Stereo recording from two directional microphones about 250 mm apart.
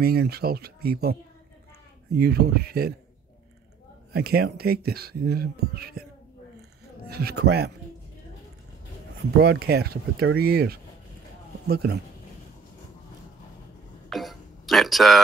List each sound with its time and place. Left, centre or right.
0.0 s speech: right
2.1 s speech: right
4.1 s speech: right
7.1 s speech: right
9.4 s speech: right
14.0 s a sound: centre